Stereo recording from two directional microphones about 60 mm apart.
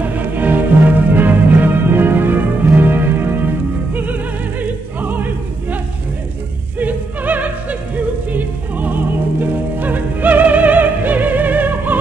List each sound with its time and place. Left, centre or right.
0.0 s music: right
3.9 s opera: right
6.8 s music: right